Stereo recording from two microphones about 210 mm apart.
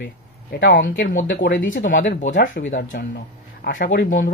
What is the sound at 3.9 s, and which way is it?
Speech, 55° left (ahead or behind).